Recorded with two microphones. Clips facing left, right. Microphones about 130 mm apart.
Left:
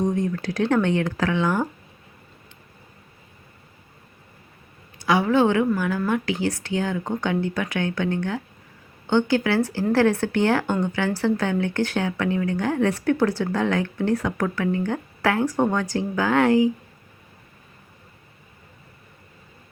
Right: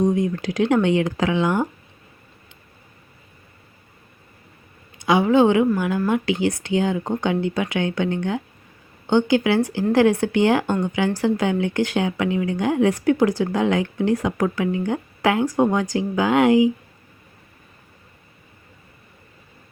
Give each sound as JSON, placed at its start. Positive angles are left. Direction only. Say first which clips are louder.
{"t": 0.0, "sound": "speech", "louder": "right 3 dB", "side_deg": -15}
{"t": 4.9, "sound": "speech", "louder": "right 3 dB", "side_deg": -20}